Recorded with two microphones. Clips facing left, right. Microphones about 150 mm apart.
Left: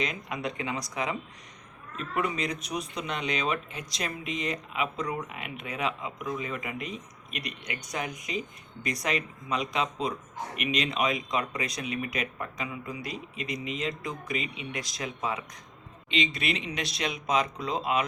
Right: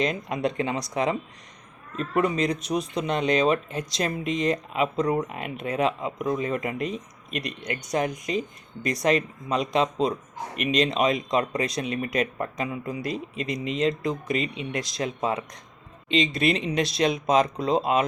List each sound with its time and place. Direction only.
0.0 s speech: 40° right (ahead or behind)
14.9 s speech: 35° right (ahead or behind)